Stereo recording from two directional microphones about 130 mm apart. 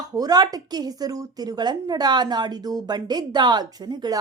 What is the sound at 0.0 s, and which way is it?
A woman's voice, 30° right (ahead or behind).